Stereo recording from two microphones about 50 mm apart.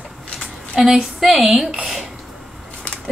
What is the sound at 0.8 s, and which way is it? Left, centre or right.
Speech, centre.